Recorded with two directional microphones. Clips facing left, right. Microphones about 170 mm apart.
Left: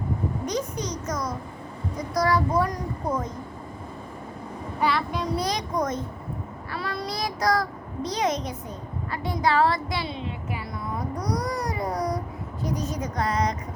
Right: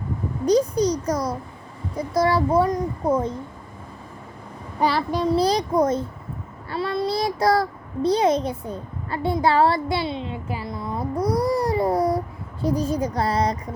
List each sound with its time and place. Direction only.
0.4 s a child's voice: 35° right (ahead or behind)
4.8 s a child's voice: 35° right (ahead or behind)
11.3 s baby cry: 30° right (ahead or behind)
12.6 s a child's voice: 30° right (ahead or behind)